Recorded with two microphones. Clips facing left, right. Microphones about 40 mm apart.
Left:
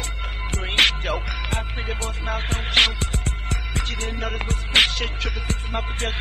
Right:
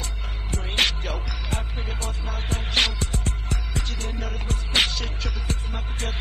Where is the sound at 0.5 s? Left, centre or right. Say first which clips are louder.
Left 4 dB; left.